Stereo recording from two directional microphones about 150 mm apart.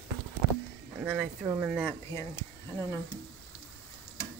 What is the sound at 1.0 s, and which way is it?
Speech, 10° right (ahead or behind).